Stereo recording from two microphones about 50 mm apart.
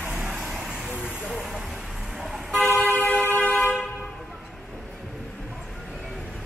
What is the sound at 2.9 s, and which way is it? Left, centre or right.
Train, left.